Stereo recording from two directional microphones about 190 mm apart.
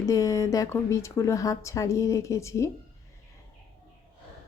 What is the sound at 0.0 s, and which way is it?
Speech, 15° left (ahead or behind).